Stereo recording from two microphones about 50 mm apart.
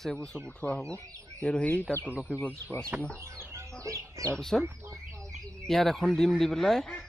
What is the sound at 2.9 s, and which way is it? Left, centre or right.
Speech, right.